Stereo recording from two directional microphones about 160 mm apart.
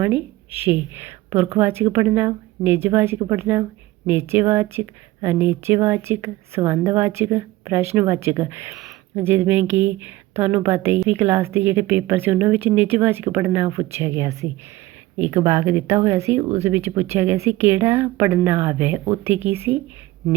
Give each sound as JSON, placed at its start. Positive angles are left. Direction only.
{"t": 0.0, "sound": "speech", "side_deg": -10}